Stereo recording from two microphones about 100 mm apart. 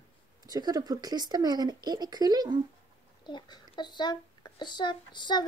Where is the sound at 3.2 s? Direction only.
50° left (ahead or behind).